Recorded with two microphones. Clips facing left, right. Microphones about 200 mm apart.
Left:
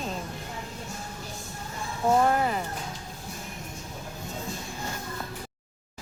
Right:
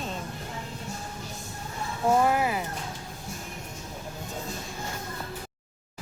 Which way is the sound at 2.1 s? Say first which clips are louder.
Even; 5° right (ahead or behind).